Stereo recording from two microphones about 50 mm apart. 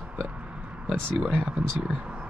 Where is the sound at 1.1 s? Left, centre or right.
Centre.